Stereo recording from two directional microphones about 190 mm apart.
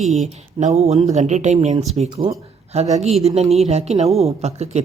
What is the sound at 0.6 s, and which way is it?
A woman's voice, 35° right (ahead or behind).